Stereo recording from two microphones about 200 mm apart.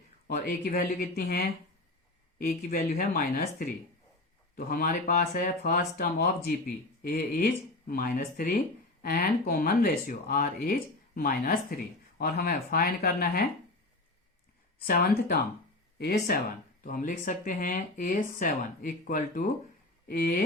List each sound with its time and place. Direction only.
0.3 s speech: 45° left (ahead or behind)
4.5 s speech: 45° left (ahead or behind)
14.8 s speech: 45° left (ahead or behind)